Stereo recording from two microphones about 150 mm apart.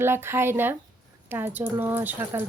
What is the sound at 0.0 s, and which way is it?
Speech, 15° right (ahead or behind).